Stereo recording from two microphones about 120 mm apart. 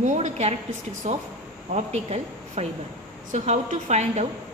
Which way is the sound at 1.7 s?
65° right (ahead or behind).